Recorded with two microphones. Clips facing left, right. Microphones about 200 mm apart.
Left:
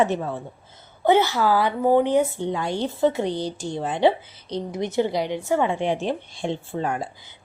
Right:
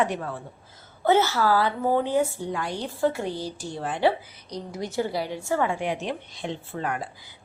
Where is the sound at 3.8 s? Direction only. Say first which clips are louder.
Left 3 dB; 20° left (ahead or behind).